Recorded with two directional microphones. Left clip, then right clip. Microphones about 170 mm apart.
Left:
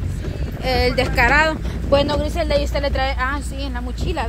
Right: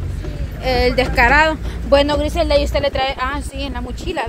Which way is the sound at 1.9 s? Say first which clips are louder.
Right 4 dB; 20° right (ahead or behind).